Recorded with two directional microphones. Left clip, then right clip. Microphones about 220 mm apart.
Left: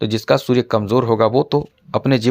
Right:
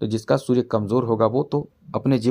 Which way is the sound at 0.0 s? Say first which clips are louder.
Left 5 dB; 30° left (ahead or behind).